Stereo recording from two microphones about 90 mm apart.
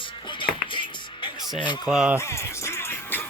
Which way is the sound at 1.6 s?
55° left (ahead or behind).